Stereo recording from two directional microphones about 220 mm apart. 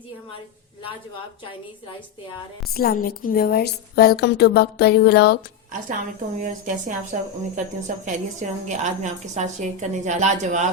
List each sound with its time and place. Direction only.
2.7 s a woman's voice: 40° left (ahead or behind)
6.4 s a woman's voice: 35° right (ahead or behind)